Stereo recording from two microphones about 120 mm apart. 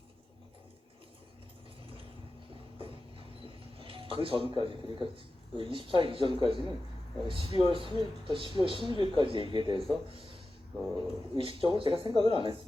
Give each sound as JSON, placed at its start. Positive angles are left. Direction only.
{"t": 2.8, "sound": "speech", "side_deg": -50}
{"t": 10.9, "sound": "speech", "side_deg": -45}